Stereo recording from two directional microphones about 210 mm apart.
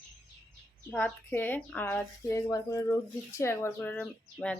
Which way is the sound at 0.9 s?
10° left (ahead or behind).